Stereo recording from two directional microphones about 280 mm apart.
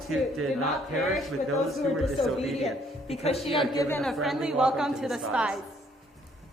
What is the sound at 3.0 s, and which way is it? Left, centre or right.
Speech, left.